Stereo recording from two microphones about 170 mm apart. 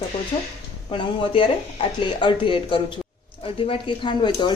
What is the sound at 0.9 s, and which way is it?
A woman's voice, 30° left (ahead or behind).